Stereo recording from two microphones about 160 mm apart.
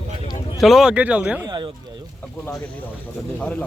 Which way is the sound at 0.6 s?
Centre (ahead or behind).